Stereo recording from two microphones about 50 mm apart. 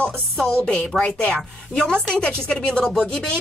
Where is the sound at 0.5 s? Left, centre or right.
Left.